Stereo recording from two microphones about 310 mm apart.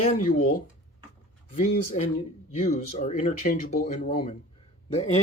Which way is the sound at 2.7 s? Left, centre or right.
Left.